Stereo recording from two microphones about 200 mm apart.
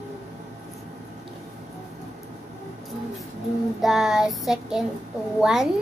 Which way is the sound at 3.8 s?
Centre (ahead or behind).